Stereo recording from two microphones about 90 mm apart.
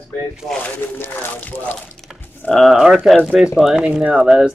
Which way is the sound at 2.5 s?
5° right (ahead or behind).